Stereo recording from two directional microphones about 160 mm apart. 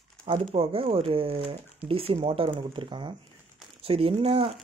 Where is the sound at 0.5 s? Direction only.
35° right (ahead or behind).